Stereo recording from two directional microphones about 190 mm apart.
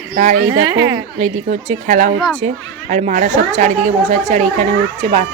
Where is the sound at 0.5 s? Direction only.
25° right (ahead or behind).